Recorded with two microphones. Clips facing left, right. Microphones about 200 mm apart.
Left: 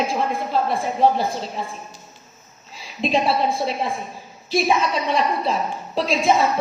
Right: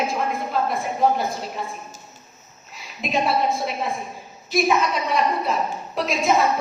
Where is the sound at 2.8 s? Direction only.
30° left (ahead or behind).